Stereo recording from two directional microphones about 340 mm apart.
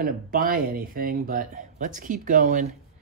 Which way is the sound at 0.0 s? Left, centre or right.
Right.